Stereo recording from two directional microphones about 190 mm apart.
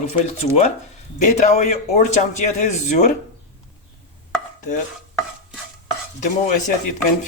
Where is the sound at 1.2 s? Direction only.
40° left (ahead or behind).